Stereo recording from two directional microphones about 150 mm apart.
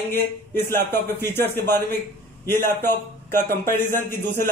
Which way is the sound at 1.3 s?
15° left (ahead or behind).